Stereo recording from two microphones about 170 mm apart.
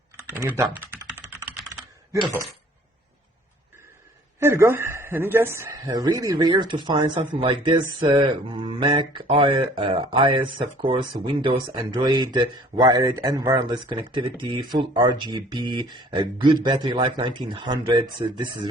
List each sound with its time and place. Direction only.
0.3 s speech: 15° right (ahead or behind)
0.9 s typing: 15° right (ahead or behind)
4.4 s speech: 15° right (ahead or behind)